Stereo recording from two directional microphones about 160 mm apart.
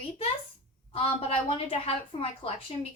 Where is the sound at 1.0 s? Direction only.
40° left (ahead or behind).